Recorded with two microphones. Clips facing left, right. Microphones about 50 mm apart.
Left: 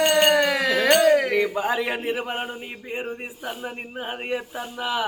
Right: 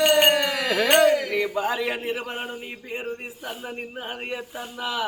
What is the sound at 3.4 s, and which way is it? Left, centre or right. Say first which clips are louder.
Speech: left 2 dB; centre.